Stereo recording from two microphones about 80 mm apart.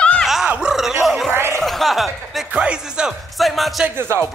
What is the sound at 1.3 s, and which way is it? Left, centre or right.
Speech, right.